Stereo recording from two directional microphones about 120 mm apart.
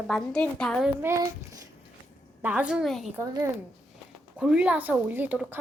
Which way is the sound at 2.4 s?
10° right (ahead or behind).